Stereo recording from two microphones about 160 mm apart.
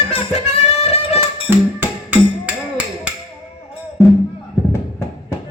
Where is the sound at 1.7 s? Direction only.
10° right (ahead or behind).